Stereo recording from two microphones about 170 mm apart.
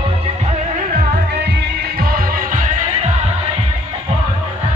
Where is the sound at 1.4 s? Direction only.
80° right; by 3.3 s 45° right (ahead or behind).